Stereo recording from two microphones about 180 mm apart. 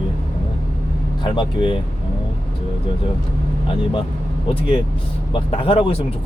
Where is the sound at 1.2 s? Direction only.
25° left (ahead or behind).